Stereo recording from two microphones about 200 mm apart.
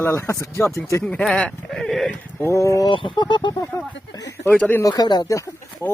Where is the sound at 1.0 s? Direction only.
5° left (ahead or behind).